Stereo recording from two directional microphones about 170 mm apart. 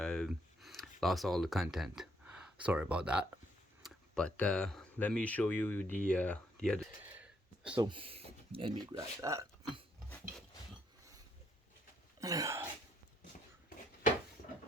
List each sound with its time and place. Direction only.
0.0 s speech: 5° left (ahead or behind)
3.8 s speech: 5° left (ahead or behind)
7.0 s a sound: 10° right (ahead or behind)
7.8 s speech: 30° right (ahead or behind)
9.2 s speech: 20° right (ahead or behind)
12.2 s speech: 20° right (ahead or behind)